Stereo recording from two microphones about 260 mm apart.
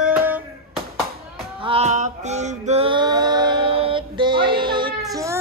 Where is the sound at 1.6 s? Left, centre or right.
Right.